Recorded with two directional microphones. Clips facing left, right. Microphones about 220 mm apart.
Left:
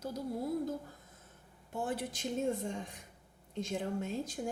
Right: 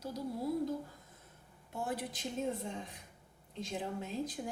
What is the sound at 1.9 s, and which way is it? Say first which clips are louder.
A woman's voice: left 2 dB; 50° left (ahead or behind).